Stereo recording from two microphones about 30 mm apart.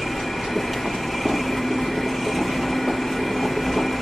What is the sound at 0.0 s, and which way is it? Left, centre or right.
Vehicle, centre.